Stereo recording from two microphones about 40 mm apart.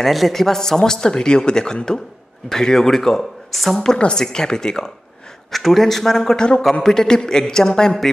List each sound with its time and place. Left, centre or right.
0.0 s speech: centre
0.3 s speech: centre
3.5 s speech: centre
4.0 s speech: centre
5.5 s speech: centre